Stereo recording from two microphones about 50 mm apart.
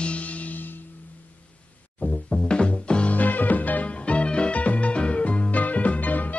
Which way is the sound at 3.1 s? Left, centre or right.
Left.